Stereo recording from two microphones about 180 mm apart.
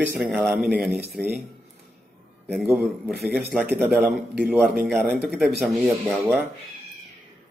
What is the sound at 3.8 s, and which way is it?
Speech, 5° right (ahead or behind).